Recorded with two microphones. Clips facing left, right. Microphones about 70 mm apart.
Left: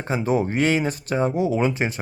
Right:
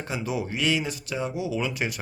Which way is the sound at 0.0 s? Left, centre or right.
Left.